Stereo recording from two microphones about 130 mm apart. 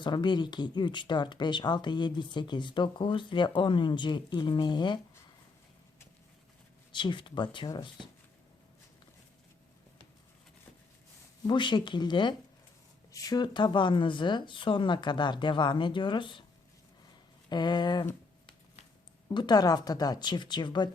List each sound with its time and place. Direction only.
0.0 s speech: 35° left (ahead or behind)
6.9 s speech: 40° left (ahead or behind)
11.4 s speech: 35° left (ahead or behind)
17.5 s speech: 35° left (ahead or behind)
19.3 s speech: 35° left (ahead or behind)